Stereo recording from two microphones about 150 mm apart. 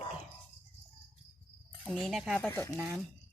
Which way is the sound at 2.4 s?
20° left (ahead or behind).